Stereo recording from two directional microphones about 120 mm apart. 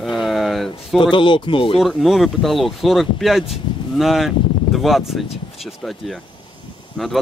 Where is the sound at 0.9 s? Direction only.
45° left (ahead or behind).